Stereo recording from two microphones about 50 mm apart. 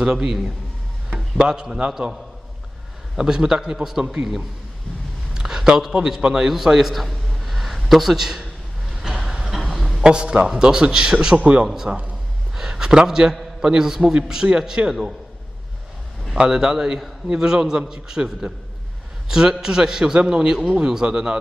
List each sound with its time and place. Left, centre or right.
0.0 s a man's voice: centre
3.2 s a man's voice: centre
5.3 s a sound: centre
5.9 s a man's voice: centre
9.0 s vehicle: centre
9.6 s a sound: centre
10.0 s a man's voice: centre
11.6 s a man's voice: centre
12.5 s a sound: centre
13.7 s a man's voice: centre
16.3 s a man's voice: centre